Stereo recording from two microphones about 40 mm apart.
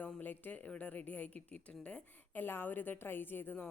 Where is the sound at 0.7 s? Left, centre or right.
Left.